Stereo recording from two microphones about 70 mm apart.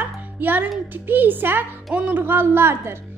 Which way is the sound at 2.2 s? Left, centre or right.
Right.